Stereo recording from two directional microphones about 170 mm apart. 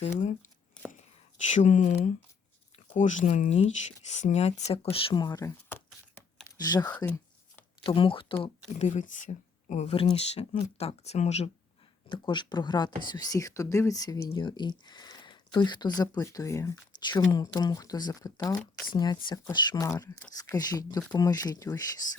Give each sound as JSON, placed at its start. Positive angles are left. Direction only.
{"t": 0.0, "sound": "speech", "side_deg": 40}
{"t": 6.9, "sound": "a sound", "side_deg": 10}
{"t": 7.9, "sound": "speech", "side_deg": 30}
{"t": 8.8, "sound": "speech", "side_deg": 45}
{"t": 12.0, "sound": "speech", "side_deg": 25}